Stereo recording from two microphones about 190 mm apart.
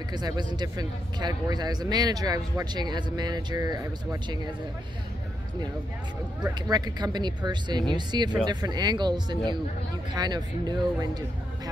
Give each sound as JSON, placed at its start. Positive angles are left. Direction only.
{"t": 0.1, "sound": "speech", "side_deg": -20}
{"t": 6.7, "sound": "speech", "side_deg": -20}